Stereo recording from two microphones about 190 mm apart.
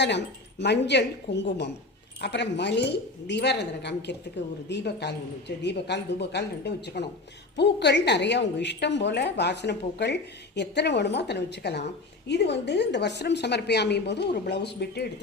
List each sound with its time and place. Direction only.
0.0 s a woman's voice: 65° left (ahead or behind)